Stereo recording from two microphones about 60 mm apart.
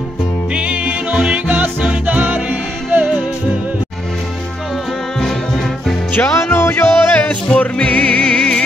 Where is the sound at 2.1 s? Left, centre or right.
Right.